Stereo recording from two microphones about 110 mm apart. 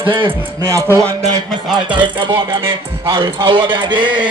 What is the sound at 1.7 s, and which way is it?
Speech, 45° right (ahead or behind).